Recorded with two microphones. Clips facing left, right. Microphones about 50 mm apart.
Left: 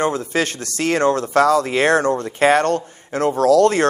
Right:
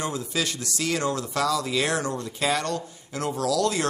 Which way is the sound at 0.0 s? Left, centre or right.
Left.